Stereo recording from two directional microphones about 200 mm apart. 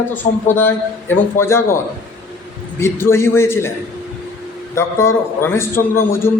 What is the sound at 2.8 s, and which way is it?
Speech, 10° left (ahead or behind).